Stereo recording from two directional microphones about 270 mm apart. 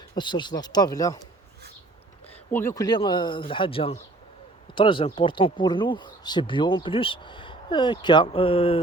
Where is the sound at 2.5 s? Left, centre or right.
Centre.